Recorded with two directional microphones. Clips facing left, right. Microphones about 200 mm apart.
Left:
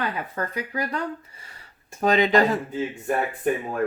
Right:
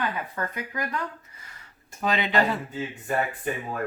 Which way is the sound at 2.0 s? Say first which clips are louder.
Left 6 dB; 45° left (ahead or behind).